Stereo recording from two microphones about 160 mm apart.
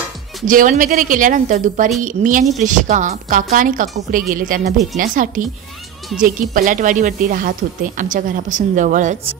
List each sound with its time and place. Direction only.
0.5 s speech: 55° right (ahead or behind)
4.3 s speech: 60° right (ahead or behind)